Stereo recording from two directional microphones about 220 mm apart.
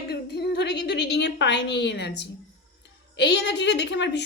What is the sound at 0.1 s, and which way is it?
A woman's voice, 50° left (ahead or behind).